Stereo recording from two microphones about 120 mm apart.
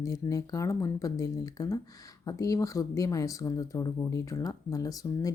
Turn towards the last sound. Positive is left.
turn(degrees=30)  # may be behind; listen again after turning